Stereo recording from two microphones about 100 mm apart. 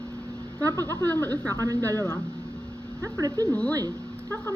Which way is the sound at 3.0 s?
35° right (ahead or behind).